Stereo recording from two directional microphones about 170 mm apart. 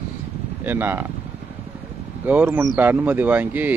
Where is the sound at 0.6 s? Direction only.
10° right (ahead or behind).